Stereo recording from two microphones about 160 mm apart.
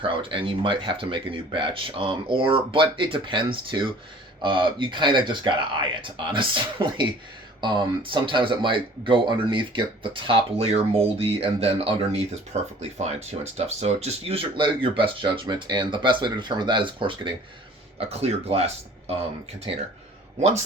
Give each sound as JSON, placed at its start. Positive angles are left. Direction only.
{"t": 0.0, "sound": "speech", "side_deg": -30}